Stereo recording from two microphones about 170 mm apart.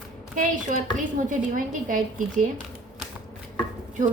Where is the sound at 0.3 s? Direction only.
50° right (ahead or behind).